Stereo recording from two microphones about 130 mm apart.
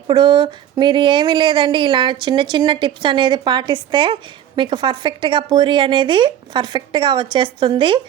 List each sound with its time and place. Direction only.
0.1 s speech: 35° right (ahead or behind)